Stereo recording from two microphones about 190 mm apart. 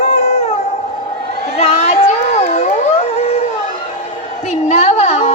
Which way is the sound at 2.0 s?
35° left (ahead or behind).